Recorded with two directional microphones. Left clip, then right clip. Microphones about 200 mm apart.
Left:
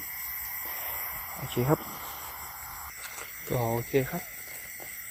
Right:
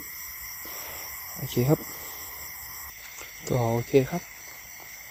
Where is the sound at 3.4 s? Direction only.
60° right (ahead or behind).